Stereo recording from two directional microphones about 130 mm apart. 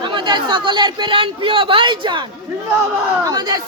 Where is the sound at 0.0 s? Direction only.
35° right (ahead or behind).